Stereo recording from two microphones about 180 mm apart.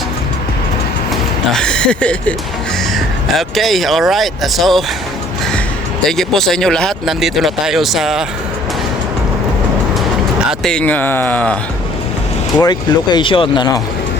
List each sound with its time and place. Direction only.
1.5 s speech: 5° left (ahead or behind)
6.1 s speech: centre (ahead or behind)
10.6 s speech: 5° left (ahead or behind)
12.5 s speech: 20° left (ahead or behind)